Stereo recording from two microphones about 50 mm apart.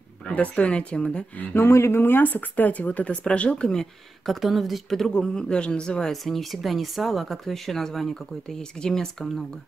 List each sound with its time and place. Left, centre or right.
0.3 s speech: left
1.4 s speech: left
1.7 s speech: left; by 3.8 s centre
4.3 s a woman's voice: centre